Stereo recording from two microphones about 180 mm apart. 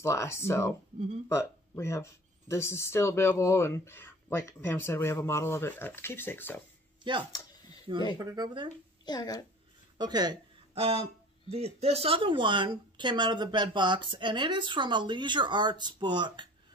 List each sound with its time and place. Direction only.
0.0 s speech: 15° left (ahead or behind)
0.9 s speech: 40° right (ahead or behind)
1.3 s speech: 15° left (ahead or behind)
7.0 s speech: 25° right (ahead or behind)
9.0 s speech: 20° left (ahead or behind)
9.9 s speech: 25° right (ahead or behind)